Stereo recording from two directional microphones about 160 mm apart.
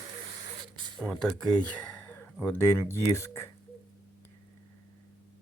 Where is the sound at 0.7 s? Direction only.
30° right (ahead or behind).